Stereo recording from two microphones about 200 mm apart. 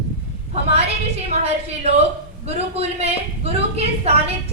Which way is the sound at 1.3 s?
30° right (ahead or behind).